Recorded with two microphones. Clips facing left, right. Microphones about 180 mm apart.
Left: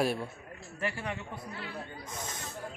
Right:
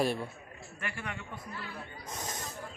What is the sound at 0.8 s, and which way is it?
Speech, 35° left (ahead or behind).